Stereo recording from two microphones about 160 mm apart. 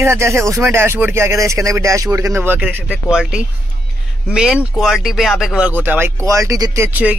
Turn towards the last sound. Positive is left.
turn(degrees=-10)  # may be behind; listen again after turning